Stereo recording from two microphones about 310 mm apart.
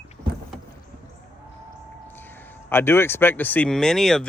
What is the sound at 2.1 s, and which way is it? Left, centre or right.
A man's voice, centre.